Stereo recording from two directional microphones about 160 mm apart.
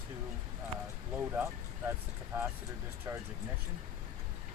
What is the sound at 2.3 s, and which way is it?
Speech, 15° right (ahead or behind).